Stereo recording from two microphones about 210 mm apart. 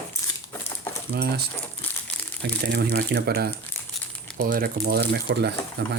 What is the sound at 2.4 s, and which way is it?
Speech, 50° right (ahead or behind).